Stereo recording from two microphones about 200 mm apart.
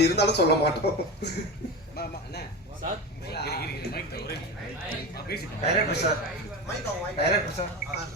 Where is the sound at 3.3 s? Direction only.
55° left (ahead or behind).